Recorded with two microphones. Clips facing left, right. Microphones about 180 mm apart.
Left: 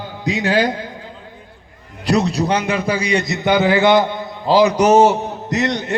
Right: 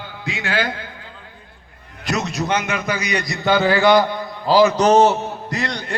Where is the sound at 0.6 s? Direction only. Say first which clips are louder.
Left 6 dB; 20° left (ahead or behind).